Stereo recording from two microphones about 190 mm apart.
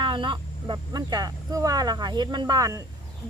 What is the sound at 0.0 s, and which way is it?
Speech, 25° right (ahead or behind).